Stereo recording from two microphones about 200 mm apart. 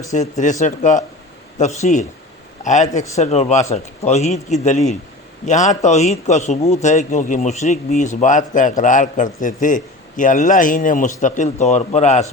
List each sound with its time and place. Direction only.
0.1 s a man's voice: 35° left (ahead or behind)